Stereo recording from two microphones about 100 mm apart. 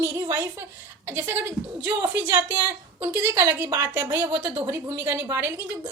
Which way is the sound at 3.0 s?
20° right (ahead or behind).